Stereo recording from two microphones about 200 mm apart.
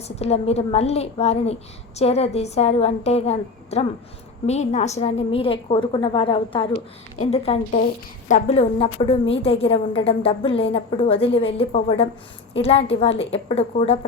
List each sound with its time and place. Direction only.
0.2 s a woman's voice: 30° left (ahead or behind)